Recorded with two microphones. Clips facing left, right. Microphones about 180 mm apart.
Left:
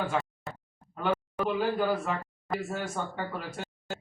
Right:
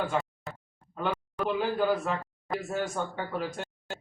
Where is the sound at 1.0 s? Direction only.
5° left (ahead or behind).